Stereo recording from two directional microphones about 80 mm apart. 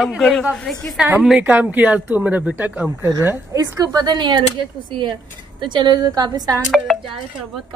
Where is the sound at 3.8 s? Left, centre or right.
Right.